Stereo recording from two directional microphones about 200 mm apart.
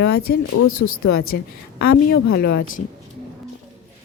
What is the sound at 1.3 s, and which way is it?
A woman's voice, 50° left (ahead or behind).